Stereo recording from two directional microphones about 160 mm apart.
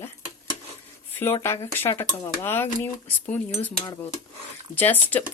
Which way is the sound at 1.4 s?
15° left (ahead or behind).